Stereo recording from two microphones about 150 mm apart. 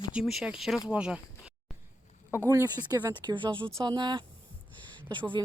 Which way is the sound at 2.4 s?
20° right (ahead or behind).